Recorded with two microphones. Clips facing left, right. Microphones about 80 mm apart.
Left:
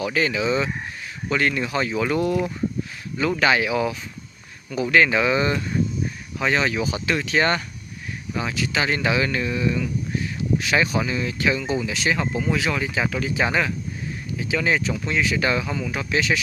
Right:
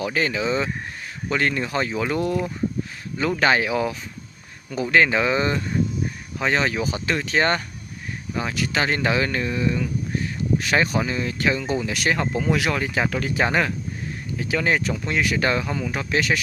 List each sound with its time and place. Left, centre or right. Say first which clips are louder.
0.0 s speech: left 1 dB; right
4.9 s speech: even; right